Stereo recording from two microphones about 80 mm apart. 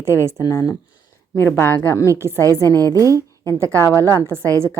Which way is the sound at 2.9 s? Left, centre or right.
Right.